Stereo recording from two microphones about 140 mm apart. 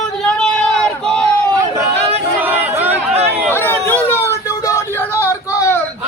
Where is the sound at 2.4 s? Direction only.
10° right (ahead or behind).